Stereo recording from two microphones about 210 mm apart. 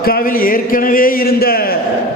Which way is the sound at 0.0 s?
45° left (ahead or behind).